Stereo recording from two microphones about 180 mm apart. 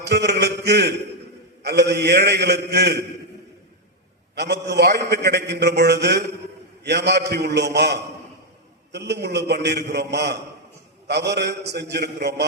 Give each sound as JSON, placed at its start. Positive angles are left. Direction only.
{"t": 0.0, "sound": "a sound", "side_deg": -70}
{"t": 1.6, "sound": "a man's voice", "side_deg": -70}
{"t": 4.4, "sound": "a man's voice", "side_deg": -70}